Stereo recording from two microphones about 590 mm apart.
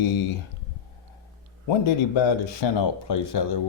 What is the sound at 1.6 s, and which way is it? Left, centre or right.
Speech, left.